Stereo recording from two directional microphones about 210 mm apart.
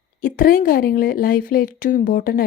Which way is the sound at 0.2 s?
40° left (ahead or behind).